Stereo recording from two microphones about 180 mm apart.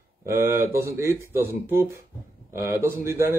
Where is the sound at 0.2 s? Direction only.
15° right (ahead or behind).